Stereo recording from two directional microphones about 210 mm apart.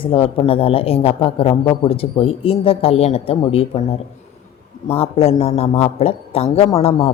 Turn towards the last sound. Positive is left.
turn(degrees=30)  # may be behind; listen again after turning